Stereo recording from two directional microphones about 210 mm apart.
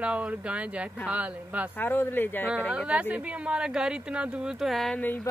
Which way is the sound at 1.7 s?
10° left (ahead or behind).